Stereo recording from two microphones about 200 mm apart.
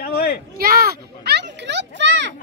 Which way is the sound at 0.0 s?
50° left (ahead or behind).